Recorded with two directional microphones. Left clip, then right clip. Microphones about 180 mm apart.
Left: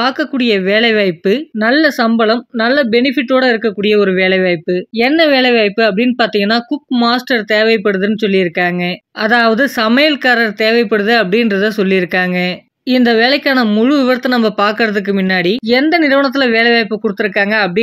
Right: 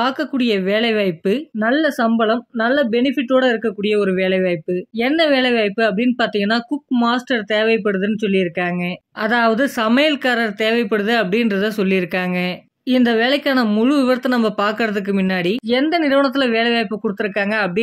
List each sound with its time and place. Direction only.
0.0 s speech: 20° left (ahead or behind)